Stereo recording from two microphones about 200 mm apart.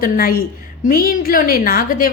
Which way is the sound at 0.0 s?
45° left (ahead or behind).